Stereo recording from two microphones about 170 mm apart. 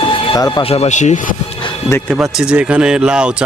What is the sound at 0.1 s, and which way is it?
Music, 30° left (ahead or behind).